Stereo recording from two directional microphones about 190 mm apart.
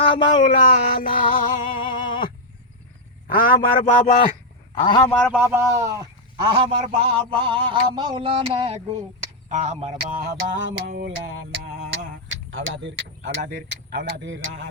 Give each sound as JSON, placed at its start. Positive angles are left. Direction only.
{"t": 0.0, "sound": "speech", "side_deg": 25}
{"t": 0.9, "sound": "a man's voice", "side_deg": 45}
{"t": 1.8, "sound": "a sound", "side_deg": 25}
{"t": 3.2, "sound": "a man's voice", "side_deg": 50}
{"t": 5.0, "sound": "a man's voice", "side_deg": 5}
{"t": 5.4, "sound": "speech", "side_deg": -15}
{"t": 6.8, "sound": "a sound", "side_deg": -30}
{"t": 9.5, "sound": "speech", "side_deg": -40}
{"t": 10.0, "sound": "music", "side_deg": -50}
{"t": 10.5, "sound": "music", "side_deg": -80}
{"t": 10.8, "sound": "music", "side_deg": -55}
{"t": 11.3, "sound": "a sound", "side_deg": -80}
{"t": 13.6, "sound": "speech", "side_deg": -60}